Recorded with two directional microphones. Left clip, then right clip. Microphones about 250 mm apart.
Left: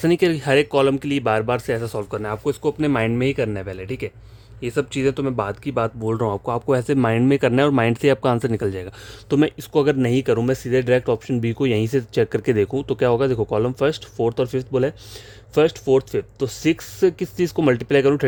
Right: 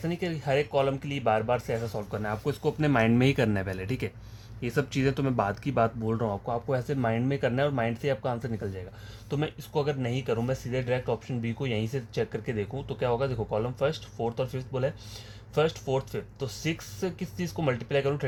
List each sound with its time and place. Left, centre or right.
0.0 s speech: left; by 5.9 s centre
6.1 s speech: left
9.3 s speech: left